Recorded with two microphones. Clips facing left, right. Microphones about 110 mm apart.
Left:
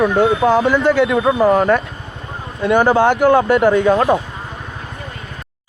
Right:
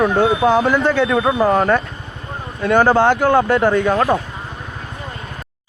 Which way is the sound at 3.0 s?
15° left (ahead or behind).